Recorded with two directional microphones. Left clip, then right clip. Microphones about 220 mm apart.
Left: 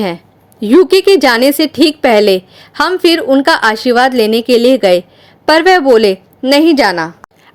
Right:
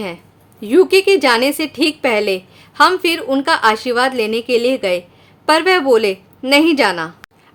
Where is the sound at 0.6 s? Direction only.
25° left (ahead or behind).